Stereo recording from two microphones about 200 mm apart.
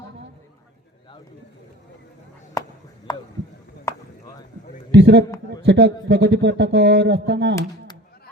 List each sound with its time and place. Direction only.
2.6 s a sound: 15° left (ahead or behind)
3.9 s chop: 15° left (ahead or behind)
4.9 s a man's voice: 60° right (ahead or behind)